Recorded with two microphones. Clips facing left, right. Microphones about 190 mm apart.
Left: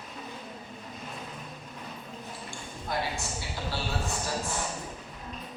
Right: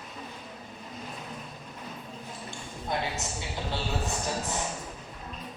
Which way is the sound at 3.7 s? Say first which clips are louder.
Right 1 dB; 20° right (ahead or behind).